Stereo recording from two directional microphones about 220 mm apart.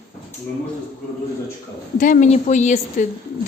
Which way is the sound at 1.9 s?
35° left (ahead or behind).